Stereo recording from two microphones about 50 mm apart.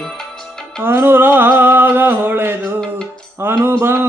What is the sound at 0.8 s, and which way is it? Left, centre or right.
Music, right.